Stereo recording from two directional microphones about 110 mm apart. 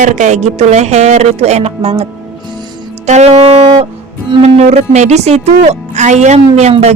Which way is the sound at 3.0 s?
85° right.